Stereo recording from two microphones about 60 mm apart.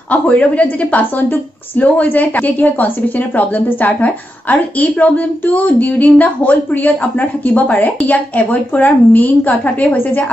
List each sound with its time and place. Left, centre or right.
0.1 s a woman's voice: left